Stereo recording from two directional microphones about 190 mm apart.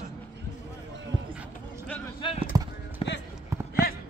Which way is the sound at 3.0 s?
30° left (ahead or behind).